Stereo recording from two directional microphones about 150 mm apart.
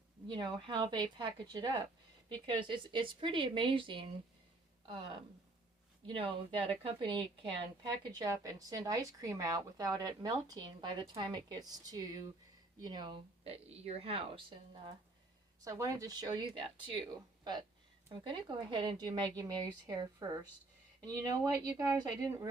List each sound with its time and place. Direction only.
0.3 s speech: 30° right (ahead or behind)
6.1 s speech: 35° right (ahead or behind)
8.2 s a woman's voice: 20° right (ahead or behind); by 14.4 s 40° right (ahead or behind)
15.6 s a woman's voice: 20° right (ahead or behind)